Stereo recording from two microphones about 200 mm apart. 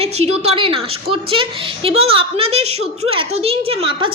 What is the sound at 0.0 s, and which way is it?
A woman's voice, 30° right (ahead or behind).